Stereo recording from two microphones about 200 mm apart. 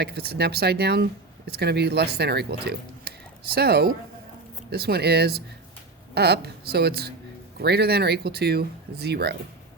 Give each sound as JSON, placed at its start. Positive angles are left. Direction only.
{"t": 0.0, "sound": "speech", "side_deg": -55}